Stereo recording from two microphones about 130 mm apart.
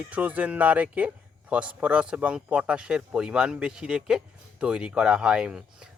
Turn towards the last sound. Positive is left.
turn(degrees=-5)  # may be behind; listen again after turning